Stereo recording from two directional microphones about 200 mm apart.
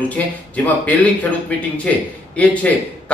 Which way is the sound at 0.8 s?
5° left (ahead or behind).